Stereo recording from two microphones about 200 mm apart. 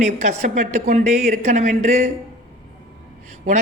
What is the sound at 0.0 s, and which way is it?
Speech, 35° right (ahead or behind).